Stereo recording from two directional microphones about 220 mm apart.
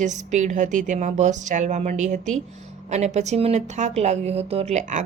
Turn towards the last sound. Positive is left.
turn(degrees=-35)  # may be behind; listen again after turning